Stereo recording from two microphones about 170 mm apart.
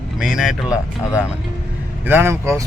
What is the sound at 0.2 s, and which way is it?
Speech, 5° right (ahead or behind).